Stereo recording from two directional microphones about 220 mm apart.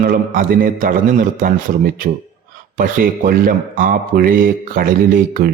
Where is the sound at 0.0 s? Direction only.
40° right (ahead or behind).